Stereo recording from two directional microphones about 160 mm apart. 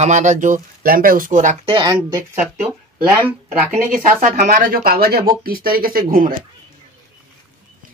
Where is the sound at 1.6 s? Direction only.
30° right (ahead or behind).